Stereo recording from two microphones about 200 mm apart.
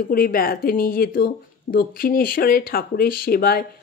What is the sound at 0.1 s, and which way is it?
Speech, 45° left (ahead or behind).